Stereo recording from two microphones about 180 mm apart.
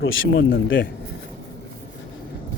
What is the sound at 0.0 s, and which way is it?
Speech, 90° left.